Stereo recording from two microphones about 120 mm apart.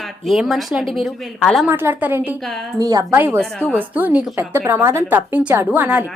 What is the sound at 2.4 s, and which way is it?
Speech, centre (ahead or behind).